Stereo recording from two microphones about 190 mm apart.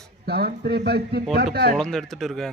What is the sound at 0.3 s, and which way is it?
Speech, 55° right (ahead or behind).